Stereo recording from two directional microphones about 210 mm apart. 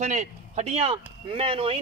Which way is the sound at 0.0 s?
35° right (ahead or behind).